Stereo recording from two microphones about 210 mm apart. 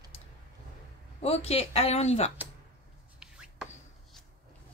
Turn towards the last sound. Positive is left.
turn(degrees=-5)  # may be behind; listen again after turning